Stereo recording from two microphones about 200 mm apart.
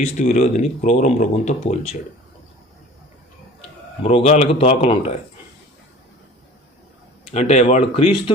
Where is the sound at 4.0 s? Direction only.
30° left (ahead or behind).